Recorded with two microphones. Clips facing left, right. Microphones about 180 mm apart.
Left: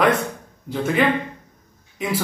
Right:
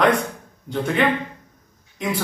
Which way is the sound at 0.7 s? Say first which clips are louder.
Left 1 dB; 5° left (ahead or behind).